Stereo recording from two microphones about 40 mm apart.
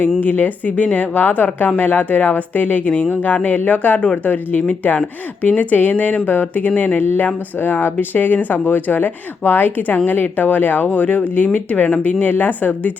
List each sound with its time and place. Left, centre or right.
0.2 s speech: left
7.6 s speech: left